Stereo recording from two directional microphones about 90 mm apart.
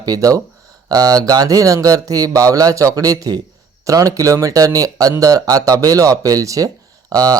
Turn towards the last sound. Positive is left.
turn(degrees=-45)  # may be behind; listen again after turning